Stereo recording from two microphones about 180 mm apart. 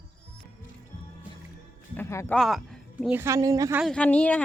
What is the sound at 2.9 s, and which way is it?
Speech, 10° right (ahead or behind).